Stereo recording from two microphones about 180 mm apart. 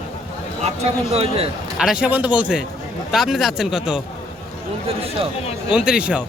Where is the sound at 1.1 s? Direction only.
35° right (ahead or behind).